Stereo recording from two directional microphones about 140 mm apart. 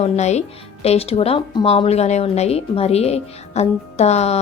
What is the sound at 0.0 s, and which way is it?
A woman's voice, 50° left (ahead or behind).